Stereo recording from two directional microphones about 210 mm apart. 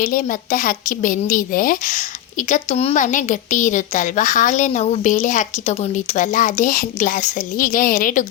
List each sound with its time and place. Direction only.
0.0 s a woman's voice: 40° left (ahead or behind)